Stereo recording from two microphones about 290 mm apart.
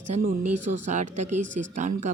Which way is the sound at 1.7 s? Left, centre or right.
Right.